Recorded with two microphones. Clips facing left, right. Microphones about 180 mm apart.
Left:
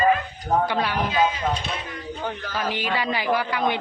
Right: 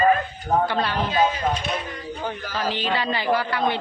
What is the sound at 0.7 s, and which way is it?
Speech, 10° left (ahead or behind).